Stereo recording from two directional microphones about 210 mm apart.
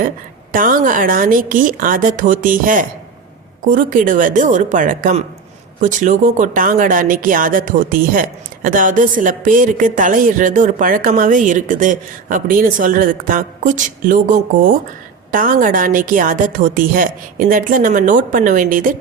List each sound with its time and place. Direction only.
0.5 s speech: 40° right (ahead or behind)
15.3 s speech: 40° right (ahead or behind)